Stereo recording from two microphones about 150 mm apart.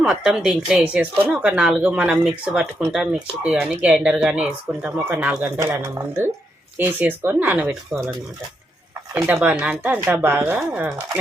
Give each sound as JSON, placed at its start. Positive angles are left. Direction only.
{"t": 0.0, "sound": "speech", "side_deg": -5}
{"t": 9.3, "sound": "speech", "side_deg": -10}